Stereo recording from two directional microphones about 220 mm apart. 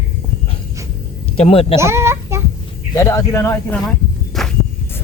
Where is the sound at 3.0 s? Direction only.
15° left (ahead or behind).